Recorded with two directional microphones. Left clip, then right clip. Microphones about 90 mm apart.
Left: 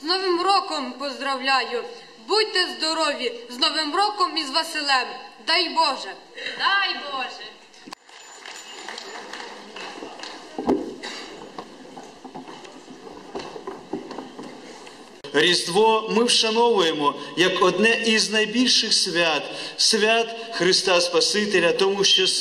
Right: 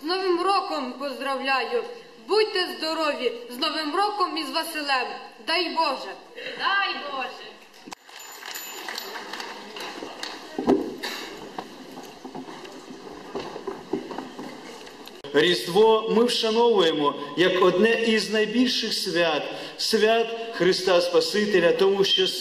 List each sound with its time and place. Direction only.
0.0 s a man's voice: 40° left (ahead or behind)
15.3 s a man's voice: 40° left (ahead or behind)